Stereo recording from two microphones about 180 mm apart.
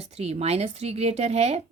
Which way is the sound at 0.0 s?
35° right (ahead or behind).